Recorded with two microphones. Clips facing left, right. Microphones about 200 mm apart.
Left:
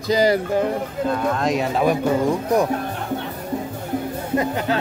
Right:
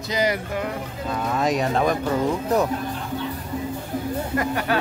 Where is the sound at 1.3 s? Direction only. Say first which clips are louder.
Left 1 dB; centre (ahead or behind).